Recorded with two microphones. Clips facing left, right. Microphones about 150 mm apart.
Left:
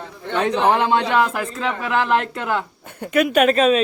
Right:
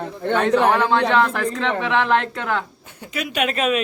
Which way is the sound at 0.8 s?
15° left (ahead or behind).